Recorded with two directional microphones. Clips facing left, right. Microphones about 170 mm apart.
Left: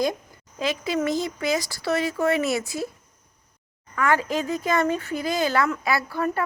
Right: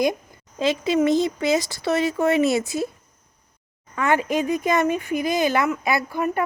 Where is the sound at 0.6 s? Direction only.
25° right (ahead or behind).